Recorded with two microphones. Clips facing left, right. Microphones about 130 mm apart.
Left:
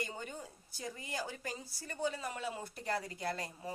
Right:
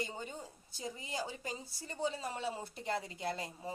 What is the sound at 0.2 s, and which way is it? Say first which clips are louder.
A woman's voice: even; 20° right (ahead or behind).